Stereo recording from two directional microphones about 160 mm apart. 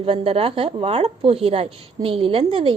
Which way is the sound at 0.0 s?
35° right (ahead or behind).